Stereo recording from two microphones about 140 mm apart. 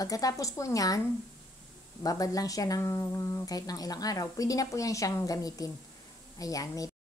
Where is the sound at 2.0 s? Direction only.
25° left (ahead or behind).